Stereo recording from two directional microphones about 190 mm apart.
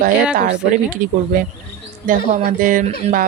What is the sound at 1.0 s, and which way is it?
Speech, 40° right (ahead or behind).